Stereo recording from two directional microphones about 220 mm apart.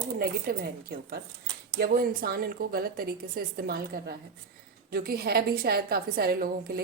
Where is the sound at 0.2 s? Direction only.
45° right (ahead or behind).